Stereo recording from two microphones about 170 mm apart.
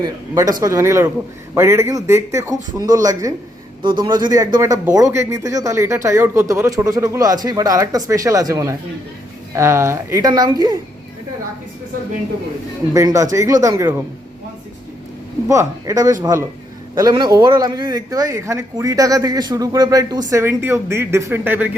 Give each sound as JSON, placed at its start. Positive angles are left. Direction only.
{"t": 0.0, "sound": "a man's voice", "side_deg": -20}
{"t": 12.9, "sound": "a man's voice", "side_deg": -20}
{"t": 15.4, "sound": "a man's voice", "side_deg": -20}